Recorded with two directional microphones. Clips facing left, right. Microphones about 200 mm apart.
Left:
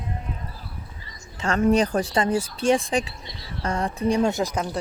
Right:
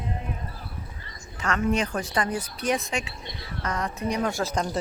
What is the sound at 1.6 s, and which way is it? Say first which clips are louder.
Speech: left 7 dB; 35° left (ahead or behind).